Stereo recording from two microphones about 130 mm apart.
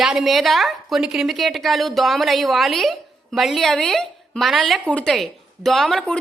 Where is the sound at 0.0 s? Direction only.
5° right (ahead or behind).